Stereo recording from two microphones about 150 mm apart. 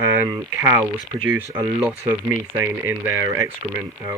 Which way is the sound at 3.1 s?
20° right (ahead or behind).